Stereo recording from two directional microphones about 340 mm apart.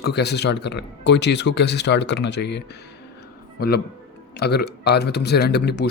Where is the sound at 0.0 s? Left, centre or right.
Left.